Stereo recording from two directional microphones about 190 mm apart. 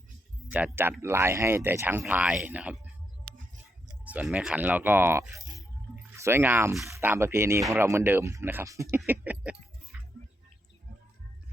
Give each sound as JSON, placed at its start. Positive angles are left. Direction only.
{"t": 0.5, "sound": "speech", "side_deg": -10}
{"t": 4.0, "sound": "speech", "side_deg": -10}
{"t": 9.0, "sound": "a sound", "side_deg": -10}